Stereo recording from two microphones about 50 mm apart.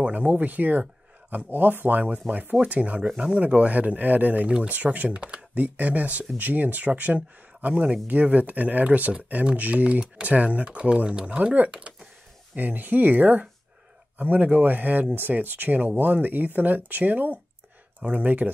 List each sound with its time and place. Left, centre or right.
0.0 s speech: right
2.1 s speech: right
4.5 s speech: right
11.7 s a sound: centre
12.5 s speech: right